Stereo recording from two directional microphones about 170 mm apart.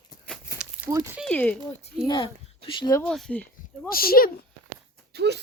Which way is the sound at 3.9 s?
60° left (ahead or behind).